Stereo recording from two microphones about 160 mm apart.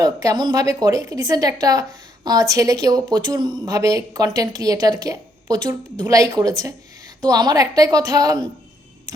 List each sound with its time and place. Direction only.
0.0 s speech: 20° right (ahead or behind)